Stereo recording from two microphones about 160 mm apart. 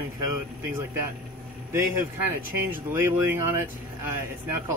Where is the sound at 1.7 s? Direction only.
15° right (ahead or behind).